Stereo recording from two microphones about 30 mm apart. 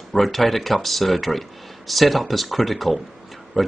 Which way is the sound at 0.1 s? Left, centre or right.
Centre.